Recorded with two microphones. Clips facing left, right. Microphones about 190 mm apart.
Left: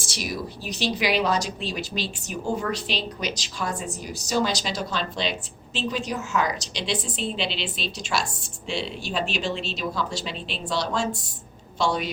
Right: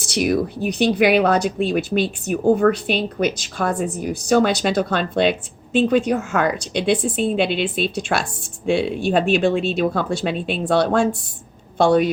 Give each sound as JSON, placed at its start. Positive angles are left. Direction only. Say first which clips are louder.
{"t": 0.0, "sound": "speech", "louder": "right 12 dB", "side_deg": -60}